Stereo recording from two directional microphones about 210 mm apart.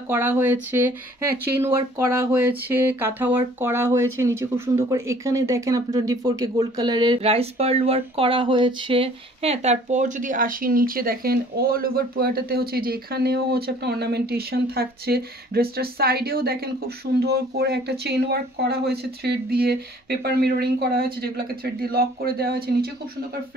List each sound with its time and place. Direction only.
0.1 s speech: 10° right (ahead or behind); by 22.8 s 45° right (ahead or behind)